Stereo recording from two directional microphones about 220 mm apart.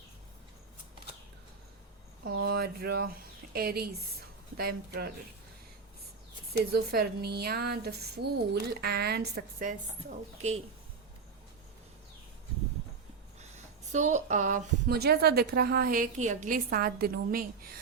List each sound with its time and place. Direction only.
2.5 s a sound: 45° right (ahead or behind)
3.5 s a woman's voice: 45° right (ahead or behind)
6.5 s a woman's voice: 45° right (ahead or behind)
13.9 s a woman's voice: 35° right (ahead or behind)